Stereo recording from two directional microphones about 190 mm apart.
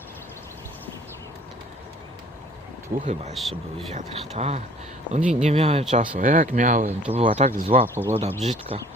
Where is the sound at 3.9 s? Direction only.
35° right (ahead or behind).